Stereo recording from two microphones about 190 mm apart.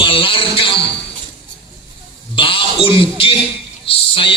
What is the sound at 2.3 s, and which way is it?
Speech, 25° left (ahead or behind).